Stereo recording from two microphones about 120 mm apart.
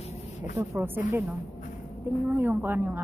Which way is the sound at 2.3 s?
15° right (ahead or behind).